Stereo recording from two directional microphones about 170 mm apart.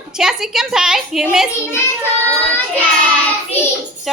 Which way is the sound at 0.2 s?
5° right (ahead or behind).